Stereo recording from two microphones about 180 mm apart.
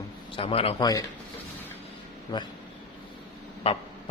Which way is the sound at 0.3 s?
30° left (ahead or behind).